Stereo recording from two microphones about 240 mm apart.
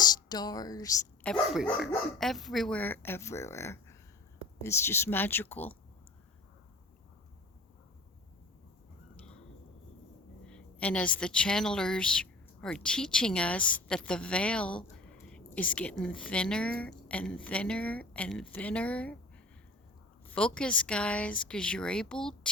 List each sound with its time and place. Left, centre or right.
0.3 s speech: centre
1.3 s speech: centre
9.1 s a sound: centre
10.4 s a sound: centre
11.2 s a woman's voice: centre
20.2 s a woman's voice: centre